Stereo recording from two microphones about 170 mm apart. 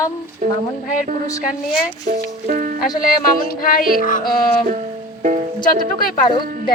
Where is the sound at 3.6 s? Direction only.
60° left (ahead or behind).